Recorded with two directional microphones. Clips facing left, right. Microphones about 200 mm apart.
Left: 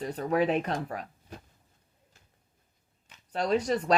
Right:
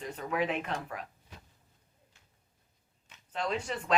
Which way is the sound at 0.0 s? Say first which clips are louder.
Left 6 dB; 35° left (ahead or behind).